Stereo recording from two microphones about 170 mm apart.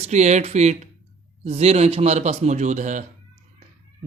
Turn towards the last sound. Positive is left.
turn(degrees=-45)  # may be behind; listen again after turning